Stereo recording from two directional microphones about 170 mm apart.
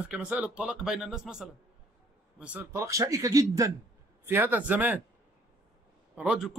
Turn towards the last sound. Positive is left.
turn(degrees=-5)  # may be behind; listen again after turning